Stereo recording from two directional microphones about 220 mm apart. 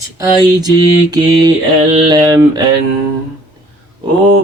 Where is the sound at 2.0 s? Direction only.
20° right (ahead or behind).